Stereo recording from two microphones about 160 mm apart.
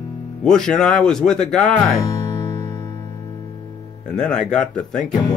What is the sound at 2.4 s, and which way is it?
Music, 20° left (ahead or behind).